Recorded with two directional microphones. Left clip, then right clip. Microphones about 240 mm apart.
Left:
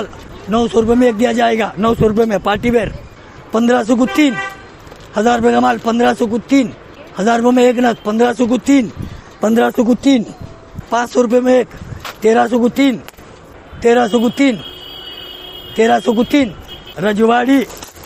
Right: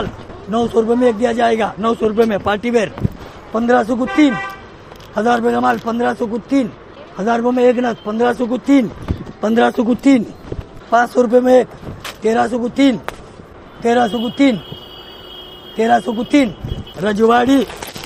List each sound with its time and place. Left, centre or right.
0.5 s a man's voice: left
5.1 s a man's voice: left
15.7 s a man's voice: left
17.0 s a man's voice: left